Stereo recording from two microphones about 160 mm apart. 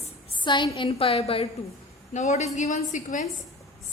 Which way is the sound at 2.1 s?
45° left (ahead or behind).